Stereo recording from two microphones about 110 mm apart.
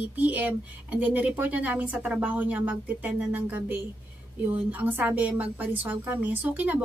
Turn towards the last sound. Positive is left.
turn(degrees=-15)  # may be behind; listen again after turning